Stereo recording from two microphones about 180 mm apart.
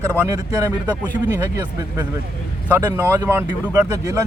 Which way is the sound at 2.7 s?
15° right (ahead or behind).